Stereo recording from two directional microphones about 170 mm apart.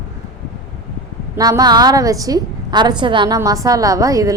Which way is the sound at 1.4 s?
20° right (ahead or behind).